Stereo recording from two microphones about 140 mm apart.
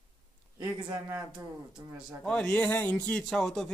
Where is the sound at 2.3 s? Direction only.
5° left (ahead or behind).